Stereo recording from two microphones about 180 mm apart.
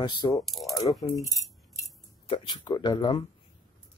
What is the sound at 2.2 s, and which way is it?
Speech, 30° left (ahead or behind).